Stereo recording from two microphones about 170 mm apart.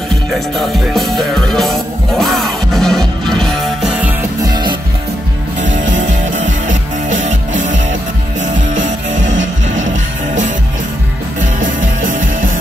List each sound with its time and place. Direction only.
0.3 s music: centre (ahead or behind)
4.5 s music: 25° right (ahead or behind)
5.6 s music: 45° right (ahead or behind)
11.6 s music: 50° right (ahead or behind)